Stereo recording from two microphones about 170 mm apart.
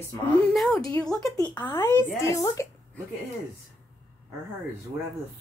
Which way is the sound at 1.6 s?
25° left (ahead or behind).